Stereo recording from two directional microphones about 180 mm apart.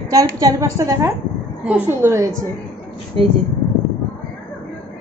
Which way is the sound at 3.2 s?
30° right (ahead or behind).